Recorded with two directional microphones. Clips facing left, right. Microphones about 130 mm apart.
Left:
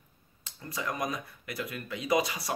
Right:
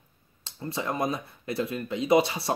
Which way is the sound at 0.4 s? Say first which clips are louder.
Right 5 dB; 30° right (ahead or behind).